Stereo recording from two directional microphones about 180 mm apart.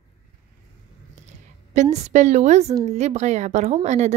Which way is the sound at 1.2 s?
40° right (ahead or behind).